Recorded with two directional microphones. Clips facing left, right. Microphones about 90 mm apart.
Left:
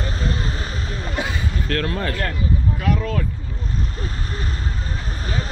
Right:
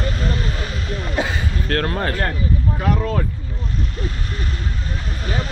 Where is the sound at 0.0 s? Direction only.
35° left (ahead or behind).